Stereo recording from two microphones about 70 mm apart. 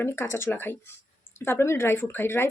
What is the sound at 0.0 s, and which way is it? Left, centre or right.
Speech, left.